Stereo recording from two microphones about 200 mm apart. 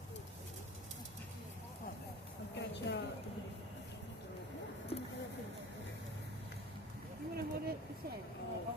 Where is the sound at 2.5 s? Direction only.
60° left (ahead or behind).